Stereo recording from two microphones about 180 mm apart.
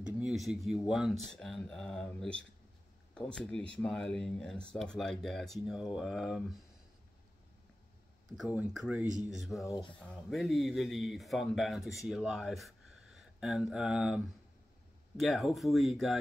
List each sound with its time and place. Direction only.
0.0 s speech: centre (ahead or behind)
8.4 s speech: 5° right (ahead or behind)
9.7 s speech: 25° left (ahead or behind)
9.9 s speech: 5° left (ahead or behind)